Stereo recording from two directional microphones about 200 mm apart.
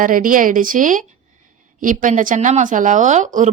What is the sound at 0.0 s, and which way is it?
Speech, 45° right (ahead or behind).